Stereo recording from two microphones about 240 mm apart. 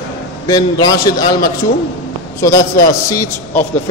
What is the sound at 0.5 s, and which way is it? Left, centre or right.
A man's voice, centre.